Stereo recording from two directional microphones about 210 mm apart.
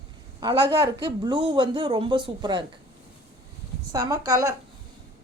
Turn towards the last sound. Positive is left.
turn(degrees=-15)  # may be behind; listen again after turning